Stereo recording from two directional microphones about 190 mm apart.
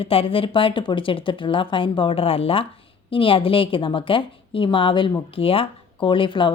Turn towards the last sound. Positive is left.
turn(degrees=25)  # may be behind; listen again after turning